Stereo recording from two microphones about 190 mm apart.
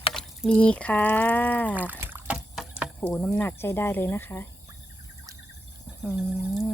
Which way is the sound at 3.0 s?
10° left (ahead or behind).